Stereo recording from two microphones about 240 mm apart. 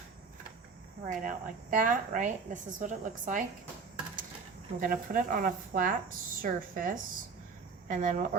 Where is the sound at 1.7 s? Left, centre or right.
Right.